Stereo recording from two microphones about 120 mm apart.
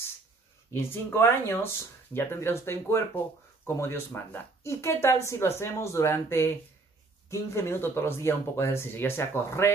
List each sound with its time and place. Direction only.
0.7 s speech: 20° left (ahead or behind)